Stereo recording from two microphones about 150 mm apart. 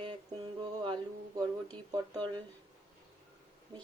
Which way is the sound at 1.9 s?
30° right (ahead or behind).